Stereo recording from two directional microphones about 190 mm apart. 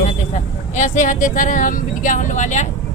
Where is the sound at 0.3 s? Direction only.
40° left (ahead or behind).